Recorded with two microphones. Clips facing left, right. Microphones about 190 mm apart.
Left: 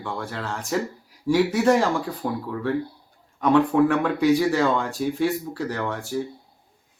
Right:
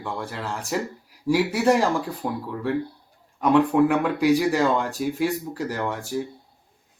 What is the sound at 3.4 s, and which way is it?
Speech, 10° right (ahead or behind).